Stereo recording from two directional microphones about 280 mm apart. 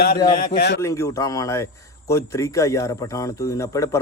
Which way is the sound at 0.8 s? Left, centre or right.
Centre.